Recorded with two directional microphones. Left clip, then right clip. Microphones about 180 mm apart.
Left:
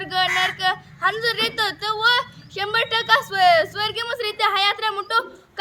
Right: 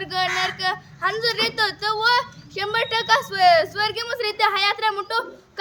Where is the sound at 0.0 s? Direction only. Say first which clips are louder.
Left 2 dB; 15° right (ahead or behind).